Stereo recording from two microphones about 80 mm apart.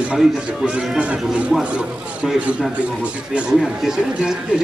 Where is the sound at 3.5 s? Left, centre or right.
Centre.